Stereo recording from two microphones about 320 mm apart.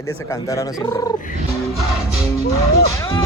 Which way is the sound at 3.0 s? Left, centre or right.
Centre.